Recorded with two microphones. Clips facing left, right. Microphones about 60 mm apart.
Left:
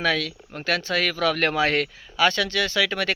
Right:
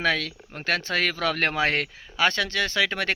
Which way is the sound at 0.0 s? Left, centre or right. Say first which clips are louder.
Left 1 dB; right.